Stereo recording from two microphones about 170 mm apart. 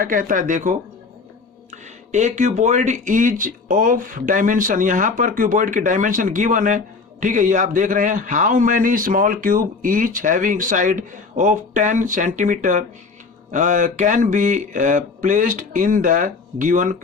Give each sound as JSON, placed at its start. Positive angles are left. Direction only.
{"t": 0.0, "sound": "speech", "side_deg": -55}